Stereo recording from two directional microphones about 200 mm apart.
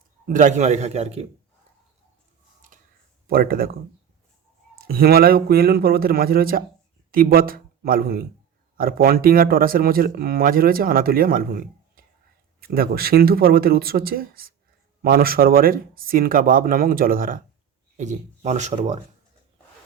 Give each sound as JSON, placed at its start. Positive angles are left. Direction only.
{"t": 0.3, "sound": "speech", "side_deg": -40}
{"t": 3.2, "sound": "speech", "side_deg": -45}
{"t": 4.8, "sound": "a man's voice", "side_deg": -50}